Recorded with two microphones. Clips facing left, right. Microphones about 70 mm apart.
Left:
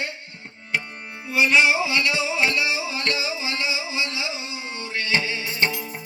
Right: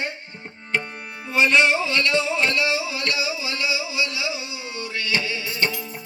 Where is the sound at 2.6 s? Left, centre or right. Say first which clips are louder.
Right 2 dB; left.